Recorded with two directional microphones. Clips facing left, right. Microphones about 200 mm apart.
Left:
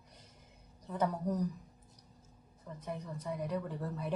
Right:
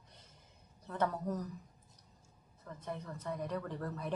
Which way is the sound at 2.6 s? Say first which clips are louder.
Left 1 dB; 10° left (ahead or behind).